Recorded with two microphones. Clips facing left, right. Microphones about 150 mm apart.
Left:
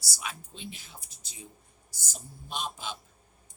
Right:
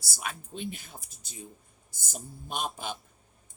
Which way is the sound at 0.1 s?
50° right (ahead or behind).